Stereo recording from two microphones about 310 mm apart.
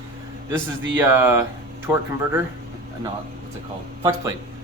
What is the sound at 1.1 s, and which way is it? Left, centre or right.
Speech, centre.